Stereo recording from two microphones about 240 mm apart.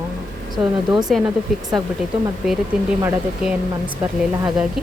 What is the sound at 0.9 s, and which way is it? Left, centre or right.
Speech, centre.